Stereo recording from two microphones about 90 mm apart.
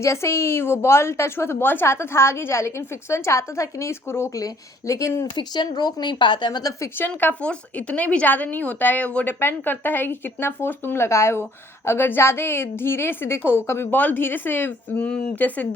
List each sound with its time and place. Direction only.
0.0 s a woman's voice: 30° left (ahead or behind)
5.3 s speech: 55° left (ahead or behind); by 6.9 s 40° left (ahead or behind)
7.2 s a woman's voice: 20° left (ahead or behind)